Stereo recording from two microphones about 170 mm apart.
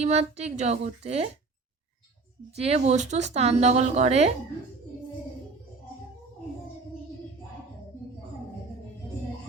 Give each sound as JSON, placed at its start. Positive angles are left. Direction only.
{"t": 0.0, "sound": "speech", "side_deg": -40}
{"t": 2.6, "sound": "speech", "side_deg": -40}